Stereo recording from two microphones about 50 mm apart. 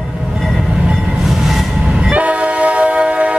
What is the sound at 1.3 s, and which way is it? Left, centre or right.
Train, centre.